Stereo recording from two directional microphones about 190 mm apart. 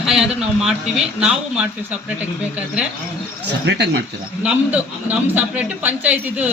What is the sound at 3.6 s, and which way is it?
Speech, 60° right (ahead or behind).